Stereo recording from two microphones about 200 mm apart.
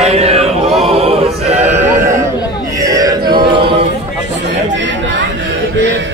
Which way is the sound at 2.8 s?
15° right (ahead or behind).